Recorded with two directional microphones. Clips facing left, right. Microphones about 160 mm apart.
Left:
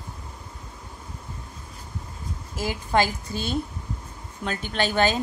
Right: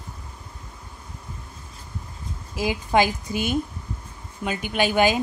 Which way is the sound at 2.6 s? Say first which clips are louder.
Right 3 dB; 15° right (ahead or behind).